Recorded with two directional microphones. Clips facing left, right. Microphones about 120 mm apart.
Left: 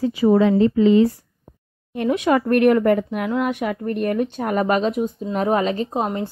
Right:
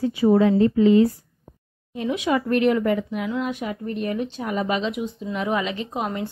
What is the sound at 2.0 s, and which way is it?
A woman's voice, 55° left (ahead or behind).